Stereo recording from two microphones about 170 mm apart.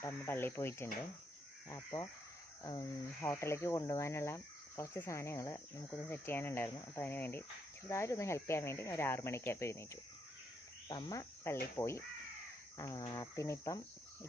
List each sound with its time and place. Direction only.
0.0 s speech: 15° left (ahead or behind)
10.8 s cricket: 25° left (ahead or behind)
11.8 s speech: 15° left (ahead or behind)
12.7 s cricket: 20° left (ahead or behind)
13.1 s speech: 20° left (ahead or behind)